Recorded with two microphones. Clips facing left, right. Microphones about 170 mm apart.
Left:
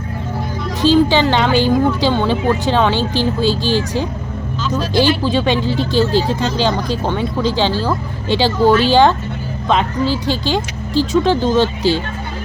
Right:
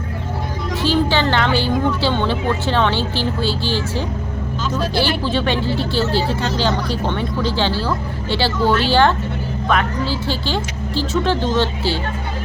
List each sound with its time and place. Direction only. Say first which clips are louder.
0.8 s speech: left 6 dB; 15° left (ahead or behind)